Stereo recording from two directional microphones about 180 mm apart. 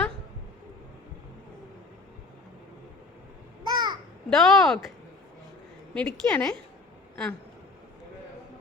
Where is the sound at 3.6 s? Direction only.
20° right (ahead or behind).